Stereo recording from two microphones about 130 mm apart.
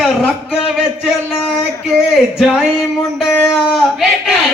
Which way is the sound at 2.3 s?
5° right (ahead or behind).